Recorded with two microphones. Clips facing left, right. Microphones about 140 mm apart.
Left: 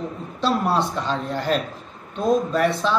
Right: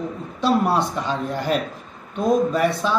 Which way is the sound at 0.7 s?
15° right (ahead or behind).